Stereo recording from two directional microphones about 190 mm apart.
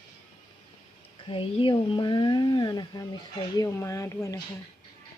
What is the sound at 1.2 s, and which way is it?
Speech, 25° left (ahead or behind).